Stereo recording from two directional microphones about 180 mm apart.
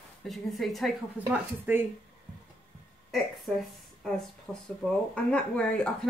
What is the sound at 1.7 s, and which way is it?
Speech, 10° right (ahead or behind).